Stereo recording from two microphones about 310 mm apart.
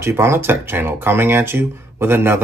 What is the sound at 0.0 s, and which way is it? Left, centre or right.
Speech, centre.